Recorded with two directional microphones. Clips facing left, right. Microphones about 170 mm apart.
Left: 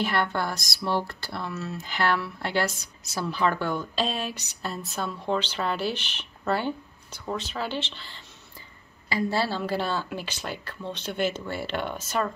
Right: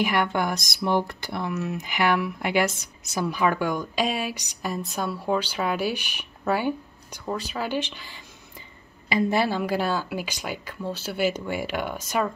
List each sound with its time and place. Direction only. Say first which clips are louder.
0.0 s a woman's voice: right 3 dB; 15° right (ahead or behind)